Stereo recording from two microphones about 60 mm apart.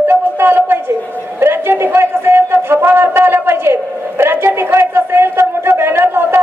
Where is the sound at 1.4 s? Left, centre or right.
Right.